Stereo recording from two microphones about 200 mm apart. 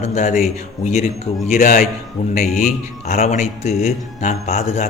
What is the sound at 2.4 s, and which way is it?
Speech, centre (ahead or behind).